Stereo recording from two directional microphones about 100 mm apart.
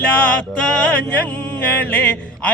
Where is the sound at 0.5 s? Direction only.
10° left (ahead or behind).